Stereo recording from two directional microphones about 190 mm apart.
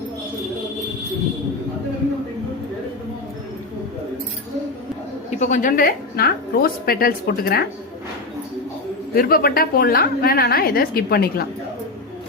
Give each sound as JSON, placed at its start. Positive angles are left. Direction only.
{"t": 5.4, "sound": "a woman's voice", "side_deg": 40}
{"t": 9.1, "sound": "a woman's voice", "side_deg": 50}